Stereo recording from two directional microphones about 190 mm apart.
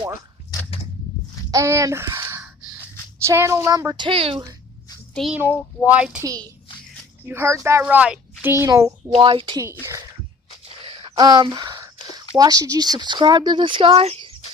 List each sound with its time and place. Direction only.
1.5 s speech: 15° right (ahead or behind)
5.1 s a child's voice: centre (ahead or behind)
7.3 s a child's voice: 15° right (ahead or behind)
9.1 s speech: 30° right (ahead or behind)
10.8 s a sound: 30° right (ahead or behind)
12.1 s speech: 20° right (ahead or behind)